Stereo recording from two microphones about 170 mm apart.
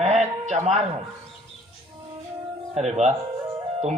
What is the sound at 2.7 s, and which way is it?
Speech, 40° right (ahead or behind).